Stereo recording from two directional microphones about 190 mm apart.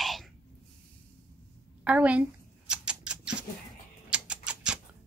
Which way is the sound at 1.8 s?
5° right (ahead or behind).